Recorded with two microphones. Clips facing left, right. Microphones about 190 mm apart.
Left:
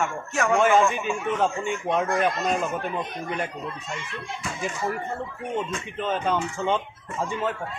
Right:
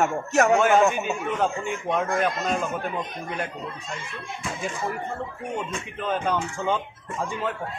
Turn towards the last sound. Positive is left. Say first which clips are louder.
# left 1 dB
turn(degrees=0)  # may be behind; listen again after turning